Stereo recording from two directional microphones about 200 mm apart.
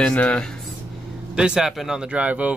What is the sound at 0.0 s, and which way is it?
Speech, 5° left (ahead or behind).